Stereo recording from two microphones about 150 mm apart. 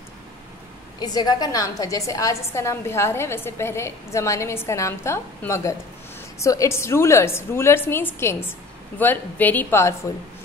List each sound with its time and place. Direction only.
0.9 s a woman's voice: 25° left (ahead or behind)